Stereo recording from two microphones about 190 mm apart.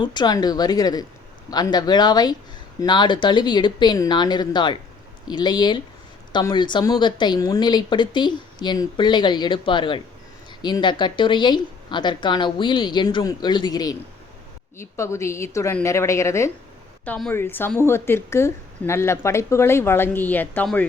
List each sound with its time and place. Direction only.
0.0 s speech: 25° left (ahead or behind)